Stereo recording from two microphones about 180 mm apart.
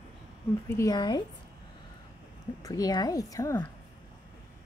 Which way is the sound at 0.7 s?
20° left (ahead or behind).